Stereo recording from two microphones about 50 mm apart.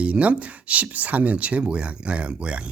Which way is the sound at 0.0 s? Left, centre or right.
Right.